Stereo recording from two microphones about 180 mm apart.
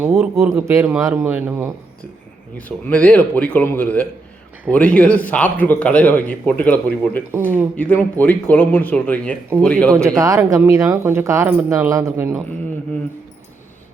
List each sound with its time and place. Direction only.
0.1 s a man's voice: centre (ahead or behind)
0.5 s speech: 15° right (ahead or behind)
2.6 s a man's voice: 10° left (ahead or behind)
10.0 s speech: 20° right (ahead or behind)